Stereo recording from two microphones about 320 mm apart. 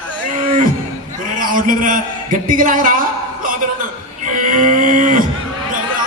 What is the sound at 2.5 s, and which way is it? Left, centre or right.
Speech, right.